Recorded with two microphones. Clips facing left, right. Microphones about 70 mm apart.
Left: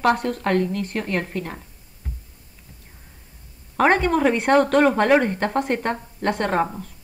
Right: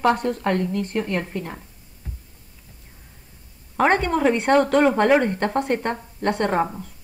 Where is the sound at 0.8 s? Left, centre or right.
Left.